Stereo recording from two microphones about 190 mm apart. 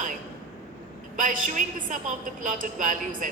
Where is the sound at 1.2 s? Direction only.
45° right (ahead or behind).